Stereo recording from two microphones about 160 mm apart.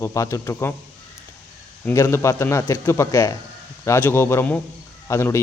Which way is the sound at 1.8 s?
15° left (ahead or behind).